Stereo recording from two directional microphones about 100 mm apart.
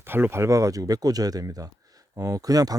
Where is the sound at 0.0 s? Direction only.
20° right (ahead or behind).